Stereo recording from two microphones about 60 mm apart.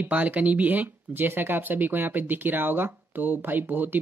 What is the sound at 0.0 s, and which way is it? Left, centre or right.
Speech, right.